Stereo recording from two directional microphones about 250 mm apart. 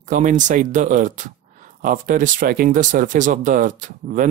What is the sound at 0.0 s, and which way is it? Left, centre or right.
Speech, right.